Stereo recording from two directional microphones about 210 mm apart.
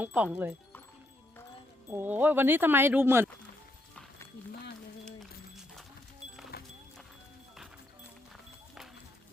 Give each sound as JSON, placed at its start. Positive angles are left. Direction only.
{"t": 0.0, "sound": "speech", "side_deg": -5}
{"t": 1.9, "sound": "speech", "side_deg": -10}
{"t": 6.5, "sound": "music", "side_deg": 45}